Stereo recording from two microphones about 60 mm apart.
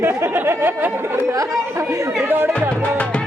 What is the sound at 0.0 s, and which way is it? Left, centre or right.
Chatter, right.